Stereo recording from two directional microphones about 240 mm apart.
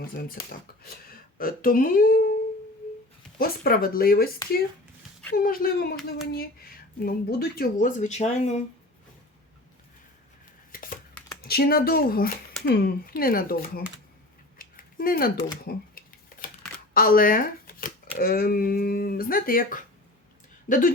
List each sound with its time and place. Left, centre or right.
0.2 s speech: left
5.4 s speech: left
10.7 s scissors: left
11.4 s speech: left
14.6 s scissors: left
16.9 s speech: left